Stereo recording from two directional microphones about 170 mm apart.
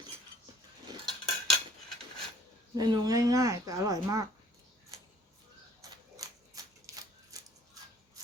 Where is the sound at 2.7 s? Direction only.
20° right (ahead or behind).